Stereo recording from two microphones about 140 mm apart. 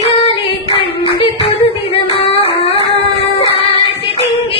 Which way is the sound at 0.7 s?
40° left (ahead or behind).